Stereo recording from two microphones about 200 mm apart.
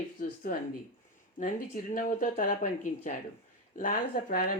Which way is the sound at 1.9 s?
40° left (ahead or behind).